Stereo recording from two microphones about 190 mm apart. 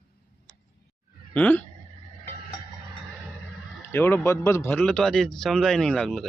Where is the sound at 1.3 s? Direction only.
10° left (ahead or behind).